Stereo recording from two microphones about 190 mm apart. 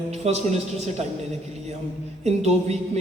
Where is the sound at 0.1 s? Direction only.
35° right (ahead or behind).